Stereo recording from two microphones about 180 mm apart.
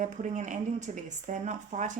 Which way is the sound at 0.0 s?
40° right (ahead or behind).